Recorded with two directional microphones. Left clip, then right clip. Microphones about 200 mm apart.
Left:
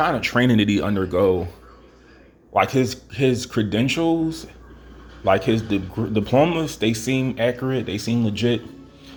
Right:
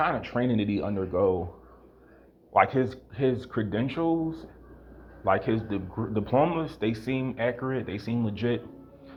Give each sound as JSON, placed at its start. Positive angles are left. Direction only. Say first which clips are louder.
{"t": 0.0, "sound": "speech", "louder": "left 7 dB", "side_deg": 30}
{"t": 2.8, "sound": "speech", "louder": "left 6 dB", "side_deg": 35}